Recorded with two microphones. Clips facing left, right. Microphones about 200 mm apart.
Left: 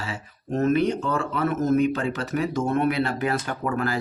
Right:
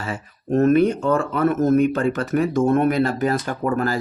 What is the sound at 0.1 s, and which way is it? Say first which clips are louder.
Speech: right 11 dB; 55° right (ahead or behind).